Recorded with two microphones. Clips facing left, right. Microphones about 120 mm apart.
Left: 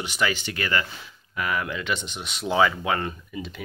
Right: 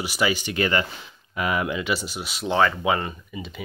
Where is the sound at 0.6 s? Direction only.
25° right (ahead or behind); by 3.6 s 5° right (ahead or behind).